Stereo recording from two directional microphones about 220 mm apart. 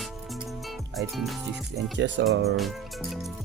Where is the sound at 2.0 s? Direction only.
55° right (ahead or behind).